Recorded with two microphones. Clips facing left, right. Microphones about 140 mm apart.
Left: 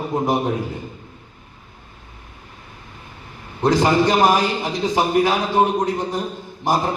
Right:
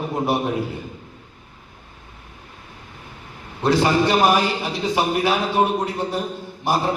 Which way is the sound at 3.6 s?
15° left (ahead or behind).